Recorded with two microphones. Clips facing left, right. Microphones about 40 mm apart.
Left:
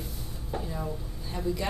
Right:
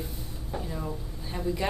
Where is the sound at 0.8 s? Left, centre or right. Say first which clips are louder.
Even; centre.